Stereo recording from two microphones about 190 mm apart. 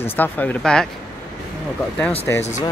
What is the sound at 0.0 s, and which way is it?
Speech, 10° left (ahead or behind).